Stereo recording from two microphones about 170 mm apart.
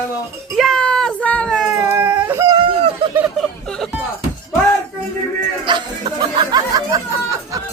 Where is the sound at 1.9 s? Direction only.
10° right (ahead or behind).